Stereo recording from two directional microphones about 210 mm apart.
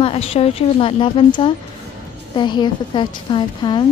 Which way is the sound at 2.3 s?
20° left (ahead or behind).